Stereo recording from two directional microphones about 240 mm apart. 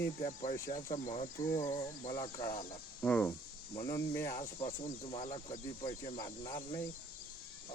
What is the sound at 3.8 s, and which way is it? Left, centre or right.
Speech, centre.